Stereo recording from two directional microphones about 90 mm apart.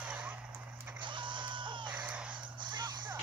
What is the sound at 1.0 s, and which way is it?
Chicken, 60° right (ahead or behind).